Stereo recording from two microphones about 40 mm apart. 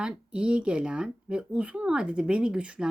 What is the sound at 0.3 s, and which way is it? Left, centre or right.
Speech, right.